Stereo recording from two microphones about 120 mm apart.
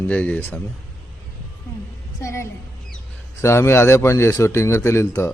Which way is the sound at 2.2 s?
25° left (ahead or behind).